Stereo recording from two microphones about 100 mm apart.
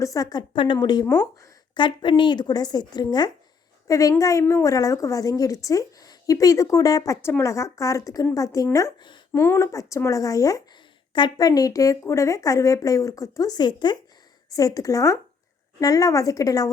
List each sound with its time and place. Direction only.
0.0 s a woman's voice: 35° left (ahead or behind)
14.5 s a woman's voice: 35° left (ahead or behind)